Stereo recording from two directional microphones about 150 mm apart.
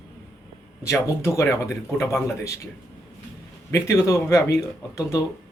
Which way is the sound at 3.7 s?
20° left (ahead or behind).